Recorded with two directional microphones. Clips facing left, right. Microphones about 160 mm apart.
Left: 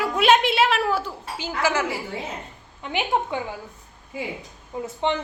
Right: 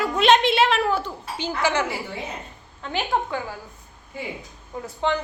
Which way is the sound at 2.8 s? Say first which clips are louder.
Left 1 dB; 15° left (ahead or behind).